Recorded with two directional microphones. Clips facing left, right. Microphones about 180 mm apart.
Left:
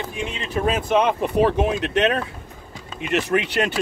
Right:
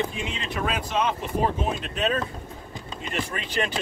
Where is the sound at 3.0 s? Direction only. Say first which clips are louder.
Left 10 dB; 70° left (ahead or behind).